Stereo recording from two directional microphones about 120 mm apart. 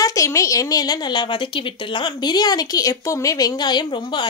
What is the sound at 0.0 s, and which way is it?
A woman's voice, 30° left (ahead or behind).